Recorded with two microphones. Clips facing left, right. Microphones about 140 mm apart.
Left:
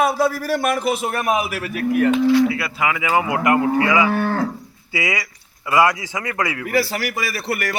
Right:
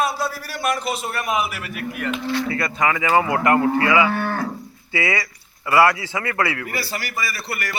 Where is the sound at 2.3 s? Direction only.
10° left (ahead or behind).